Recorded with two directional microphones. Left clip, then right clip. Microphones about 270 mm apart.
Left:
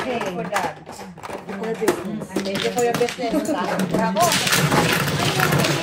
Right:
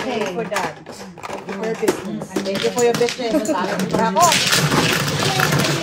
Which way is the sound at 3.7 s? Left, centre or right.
Centre.